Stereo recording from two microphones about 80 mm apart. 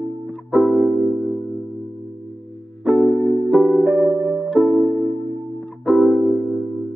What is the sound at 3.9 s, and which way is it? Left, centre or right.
Music, right.